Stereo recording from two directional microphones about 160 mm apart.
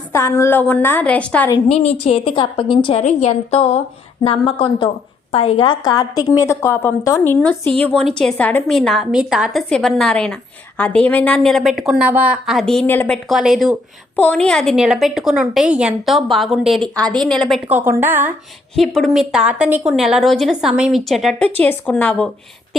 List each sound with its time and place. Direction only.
0.1 s a woman's voice: 15° left (ahead or behind)
1.6 s a woman's voice: 40° left (ahead or behind)
3.0 s a woman's voice: 45° left (ahead or behind); by 12.8 s centre (ahead or behind)
12.8 s a woman's voice: 10° left (ahead or behind)
13.2 s a woman's voice: centre (ahead or behind)
14.2 s a woman's voice: 10° left (ahead or behind)
17.7 s a woman's voice: 15° right (ahead or behind)
18.8 s a woman's voice: centre (ahead or behind)